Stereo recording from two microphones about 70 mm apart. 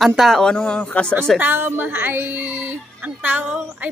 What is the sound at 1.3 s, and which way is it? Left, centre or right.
Speech, right.